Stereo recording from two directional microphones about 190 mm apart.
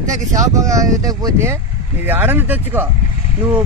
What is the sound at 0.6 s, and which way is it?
Speech, 15° right (ahead or behind).